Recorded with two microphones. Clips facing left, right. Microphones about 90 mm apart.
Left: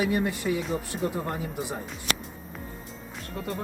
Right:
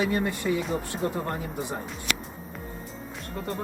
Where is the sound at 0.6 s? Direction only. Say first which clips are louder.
Right 1 dB; centre (ahead or behind).